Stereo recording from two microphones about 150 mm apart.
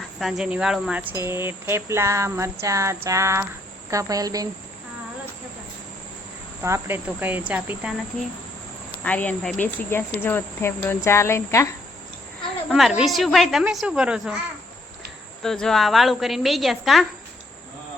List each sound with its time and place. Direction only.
0.2 s speech: centre (ahead or behind); by 4.4 s 25° right (ahead or behind)
6.6 s speech: 20° right (ahead or behind)
8.9 s speech: 10° left (ahead or behind)
13.0 s a woman's voice: centre (ahead or behind)
15.4 s a woman's voice: 5° left (ahead or behind)